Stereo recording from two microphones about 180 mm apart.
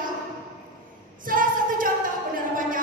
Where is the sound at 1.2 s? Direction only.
50° right (ahead or behind).